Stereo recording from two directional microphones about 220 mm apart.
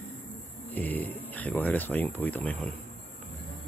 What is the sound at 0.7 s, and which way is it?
Speech, 5° left (ahead or behind).